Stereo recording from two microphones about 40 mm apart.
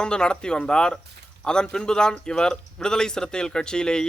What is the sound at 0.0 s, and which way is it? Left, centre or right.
Speech, left.